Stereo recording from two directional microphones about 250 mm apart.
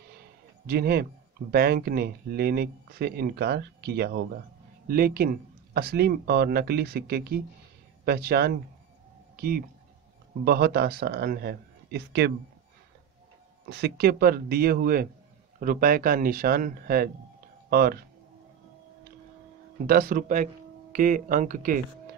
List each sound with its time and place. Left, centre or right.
0.7 s speech: right
13.7 s speech: right
19.9 s speech: right